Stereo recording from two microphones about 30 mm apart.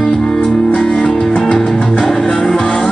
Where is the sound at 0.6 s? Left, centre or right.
Left; by 2.4 s centre.